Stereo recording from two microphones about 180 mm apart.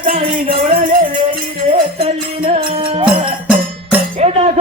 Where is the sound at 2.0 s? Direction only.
35° right (ahead or behind).